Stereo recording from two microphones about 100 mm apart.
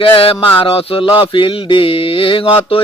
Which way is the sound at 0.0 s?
65° left (ahead or behind).